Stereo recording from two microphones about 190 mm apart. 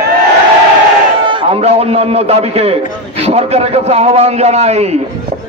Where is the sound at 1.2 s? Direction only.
30° right (ahead or behind).